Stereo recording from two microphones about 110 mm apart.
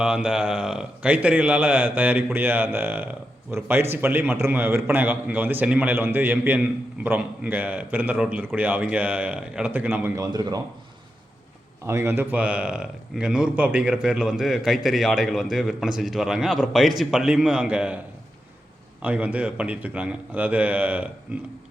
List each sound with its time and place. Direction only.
0.0 s speech: 10° right (ahead or behind)
10.2 s a man's voice: 35° right (ahead or behind)
11.9 s a man's voice: 25° right (ahead or behind)
19.0 s speech: 10° right (ahead or behind)